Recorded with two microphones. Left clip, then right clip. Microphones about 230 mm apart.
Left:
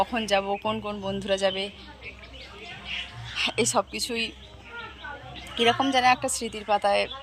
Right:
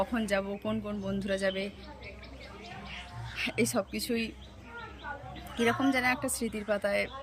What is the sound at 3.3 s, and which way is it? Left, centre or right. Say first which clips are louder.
A woman's voice: left 6 dB; centre.